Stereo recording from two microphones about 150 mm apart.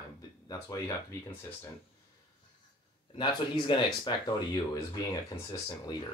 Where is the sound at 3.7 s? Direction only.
35° left (ahead or behind).